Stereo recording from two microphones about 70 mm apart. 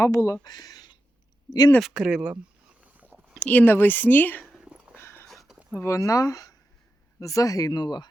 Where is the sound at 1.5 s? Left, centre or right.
Left.